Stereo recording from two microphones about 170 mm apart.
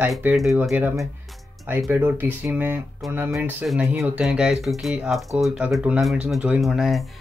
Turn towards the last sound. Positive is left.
turn(degrees=0)  # may be behind; listen again after turning